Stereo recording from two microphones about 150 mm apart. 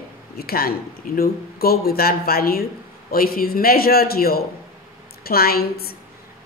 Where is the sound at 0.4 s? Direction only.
90° left.